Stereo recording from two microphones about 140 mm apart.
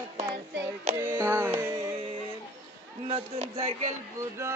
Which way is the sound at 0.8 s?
65° right (ahead or behind).